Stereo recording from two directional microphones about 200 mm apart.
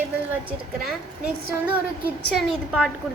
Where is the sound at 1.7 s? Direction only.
10° right (ahead or behind).